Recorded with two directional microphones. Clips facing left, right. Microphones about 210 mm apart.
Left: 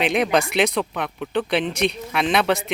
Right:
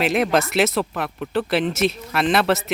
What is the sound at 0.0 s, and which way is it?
Speech, 5° right (ahead or behind).